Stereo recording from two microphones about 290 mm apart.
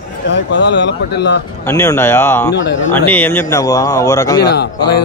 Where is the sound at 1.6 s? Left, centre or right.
Centre.